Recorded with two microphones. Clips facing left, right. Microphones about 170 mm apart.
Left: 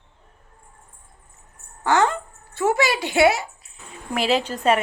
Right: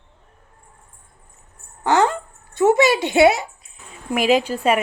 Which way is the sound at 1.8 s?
20° right (ahead or behind).